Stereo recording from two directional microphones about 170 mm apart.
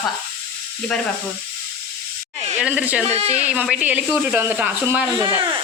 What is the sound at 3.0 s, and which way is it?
Speech, 40° right (ahead or behind).